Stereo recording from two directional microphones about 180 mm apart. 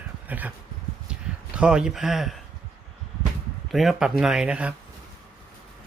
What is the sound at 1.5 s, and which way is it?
Speech, 5° right (ahead or behind).